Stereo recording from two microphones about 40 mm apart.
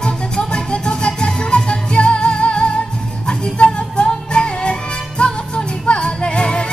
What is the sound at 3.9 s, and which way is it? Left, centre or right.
Music, left.